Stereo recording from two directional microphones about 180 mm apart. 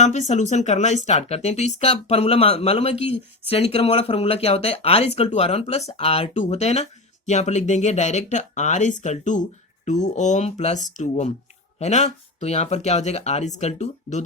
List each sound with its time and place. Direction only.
0.0 s speech: 40° left (ahead or behind)